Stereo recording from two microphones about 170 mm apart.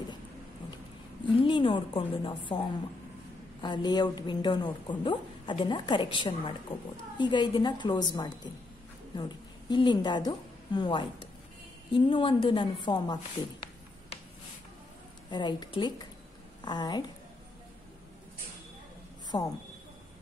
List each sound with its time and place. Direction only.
1.3 s a woman's voice: 30° left (ahead or behind)
3.6 s a woman's voice: 25° left (ahead or behind)
15.2 s a woman's voice: 25° left (ahead or behind)
19.3 s a woman's voice: 30° left (ahead or behind)